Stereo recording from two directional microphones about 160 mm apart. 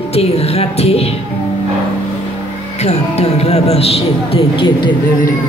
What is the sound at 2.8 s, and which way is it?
A woman's voice, 40° left (ahead or behind).